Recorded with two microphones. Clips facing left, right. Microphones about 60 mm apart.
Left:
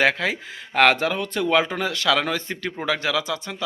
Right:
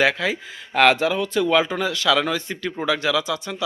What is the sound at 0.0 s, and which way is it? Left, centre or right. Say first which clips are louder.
Speech: right 1 dB; left.